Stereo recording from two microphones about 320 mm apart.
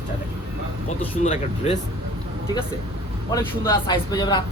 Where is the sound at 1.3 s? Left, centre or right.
Centre.